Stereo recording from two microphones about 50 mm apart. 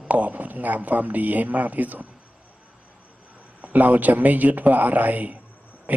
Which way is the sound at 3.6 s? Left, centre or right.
Right.